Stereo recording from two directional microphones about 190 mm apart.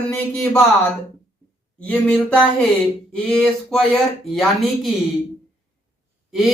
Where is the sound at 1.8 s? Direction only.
5° left (ahead or behind).